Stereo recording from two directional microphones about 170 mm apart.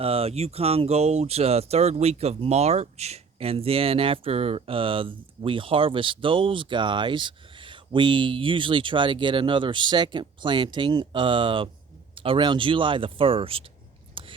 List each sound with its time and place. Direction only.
0.0 s speech: 35° right (ahead or behind)
14.2 s whispering: 30° right (ahead or behind)